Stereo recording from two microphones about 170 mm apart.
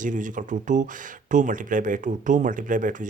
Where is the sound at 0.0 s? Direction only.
50° right (ahead or behind).